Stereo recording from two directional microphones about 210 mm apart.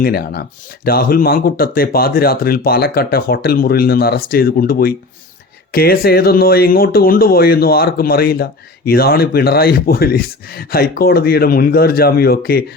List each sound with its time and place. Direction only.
0.0 s speech: 50° left (ahead or behind)